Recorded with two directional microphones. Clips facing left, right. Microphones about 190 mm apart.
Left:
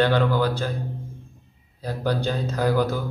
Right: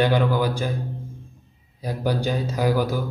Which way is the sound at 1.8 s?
10° right (ahead or behind).